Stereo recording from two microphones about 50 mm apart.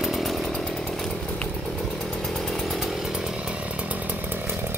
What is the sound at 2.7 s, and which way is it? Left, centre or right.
Chainsaw, centre.